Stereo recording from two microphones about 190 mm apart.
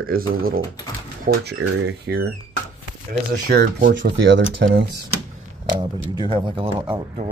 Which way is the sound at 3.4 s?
50° right (ahead or behind).